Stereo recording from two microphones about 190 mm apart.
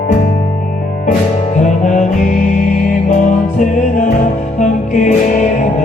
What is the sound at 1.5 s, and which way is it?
Music, 40° left (ahead or behind).